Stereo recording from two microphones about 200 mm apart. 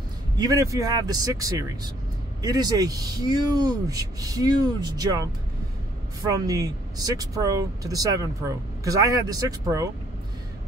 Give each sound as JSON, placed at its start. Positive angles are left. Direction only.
{"t": 0.4, "sound": "speech", "side_deg": -15}
{"t": 6.4, "sound": "speech", "side_deg": -20}